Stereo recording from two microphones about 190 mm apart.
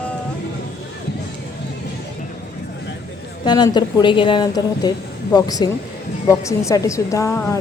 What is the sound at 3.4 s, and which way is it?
A woman's voice, 20° left (ahead or behind).